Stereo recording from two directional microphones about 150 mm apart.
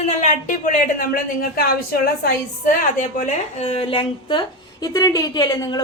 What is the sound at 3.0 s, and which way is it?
Speech, 55° left (ahead or behind).